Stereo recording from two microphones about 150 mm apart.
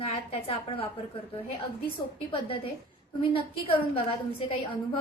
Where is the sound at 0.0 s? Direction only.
40° left (ahead or behind).